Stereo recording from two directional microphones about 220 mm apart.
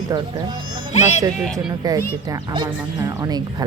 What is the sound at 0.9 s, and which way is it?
Speech, 30° left (ahead or behind).